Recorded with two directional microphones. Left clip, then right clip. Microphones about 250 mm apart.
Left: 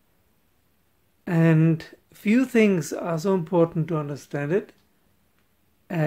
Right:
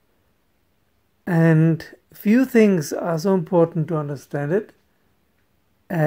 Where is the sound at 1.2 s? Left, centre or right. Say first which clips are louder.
Right 3 dB; centre.